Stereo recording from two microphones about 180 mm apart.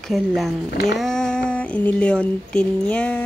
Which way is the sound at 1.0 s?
5° left (ahead or behind).